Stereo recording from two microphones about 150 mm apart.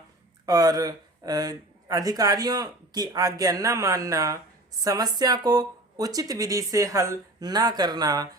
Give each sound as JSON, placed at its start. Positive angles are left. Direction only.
{"t": 0.4, "sound": "speech", "side_deg": -25}